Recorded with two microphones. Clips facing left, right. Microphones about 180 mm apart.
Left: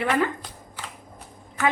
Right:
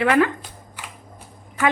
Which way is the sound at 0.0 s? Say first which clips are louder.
Right 6 dB; 80° right.